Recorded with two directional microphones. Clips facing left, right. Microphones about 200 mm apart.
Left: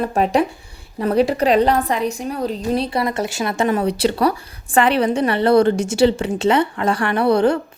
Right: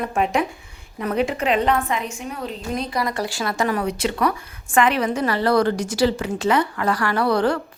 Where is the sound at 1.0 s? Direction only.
35° left (ahead or behind).